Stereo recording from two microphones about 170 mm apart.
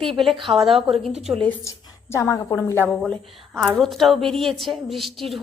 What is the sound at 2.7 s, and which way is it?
Speech, 10° right (ahead or behind).